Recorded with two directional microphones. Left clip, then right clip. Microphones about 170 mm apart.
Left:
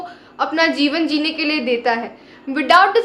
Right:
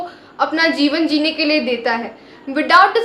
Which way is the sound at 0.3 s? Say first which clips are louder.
Right 1 dB; 20° left (ahead or behind).